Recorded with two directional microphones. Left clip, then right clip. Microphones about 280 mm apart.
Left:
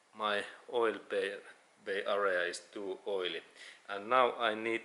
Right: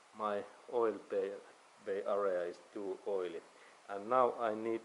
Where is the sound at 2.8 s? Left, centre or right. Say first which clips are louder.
Even; right.